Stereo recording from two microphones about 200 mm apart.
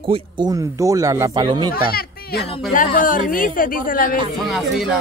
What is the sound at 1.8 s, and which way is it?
Speech, 50° left (ahead or behind).